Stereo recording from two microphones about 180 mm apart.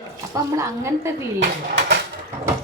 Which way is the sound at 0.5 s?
15° right (ahead or behind).